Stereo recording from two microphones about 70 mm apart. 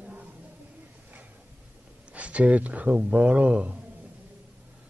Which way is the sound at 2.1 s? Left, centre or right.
Centre.